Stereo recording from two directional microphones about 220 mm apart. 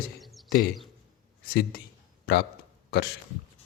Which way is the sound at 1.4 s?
40° left (ahead or behind).